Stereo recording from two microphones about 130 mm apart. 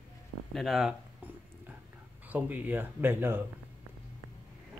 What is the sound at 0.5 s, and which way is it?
Speech, centre (ahead or behind).